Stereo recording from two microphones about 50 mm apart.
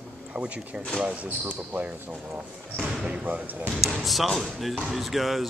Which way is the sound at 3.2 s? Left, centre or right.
Right.